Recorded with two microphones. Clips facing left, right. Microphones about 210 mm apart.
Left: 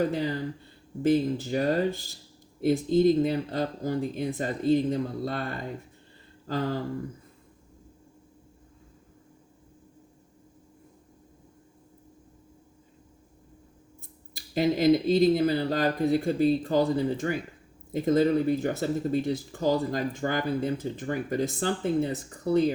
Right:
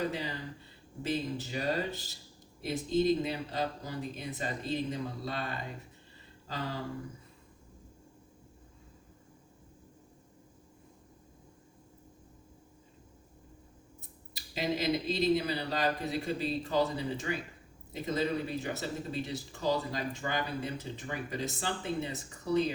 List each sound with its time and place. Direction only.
0.0 s speech: 45° left (ahead or behind)
14.3 s speech: 45° left (ahead or behind)